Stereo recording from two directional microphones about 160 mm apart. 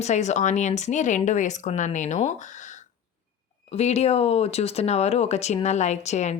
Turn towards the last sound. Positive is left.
turn(degrees=45)  # may be behind; listen again after turning